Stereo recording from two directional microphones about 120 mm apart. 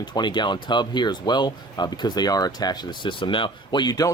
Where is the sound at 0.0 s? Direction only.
40° left (ahead or behind).